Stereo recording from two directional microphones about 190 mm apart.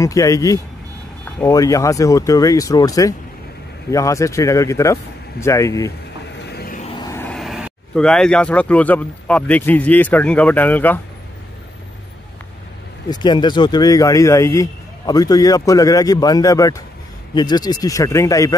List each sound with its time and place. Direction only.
0.0 s speech: 15° left (ahead or behind)
6.4 s vehicle: 55° left (ahead or behind)
7.0 s speech: 15° left (ahead or behind)
13.1 s a man's voice: 25° left (ahead or behind)